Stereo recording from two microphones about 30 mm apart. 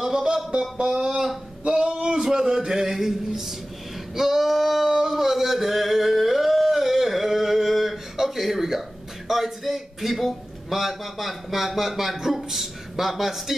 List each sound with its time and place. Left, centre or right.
0.0 s music: centre
0.5 s music: right
0.8 s speech: right
2.0 s a sound: right
2.2 s a sound: centre
4.1 s male singing: centre
9.3 s a man's voice: centre